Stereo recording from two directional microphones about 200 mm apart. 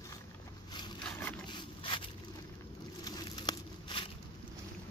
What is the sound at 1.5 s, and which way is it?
Scrape, 25° left (ahead or behind).